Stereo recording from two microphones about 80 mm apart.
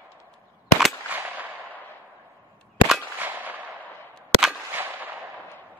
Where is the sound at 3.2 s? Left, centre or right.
Right.